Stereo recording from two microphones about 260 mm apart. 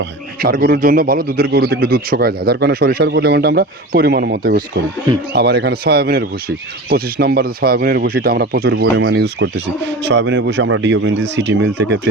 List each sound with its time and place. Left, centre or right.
0.0 s speech: right